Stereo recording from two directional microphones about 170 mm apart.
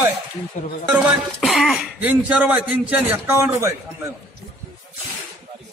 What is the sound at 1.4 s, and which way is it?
Speech, centre (ahead or behind).